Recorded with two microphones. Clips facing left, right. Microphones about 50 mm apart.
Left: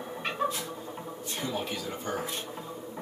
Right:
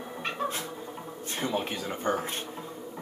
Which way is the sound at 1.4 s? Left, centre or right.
Right.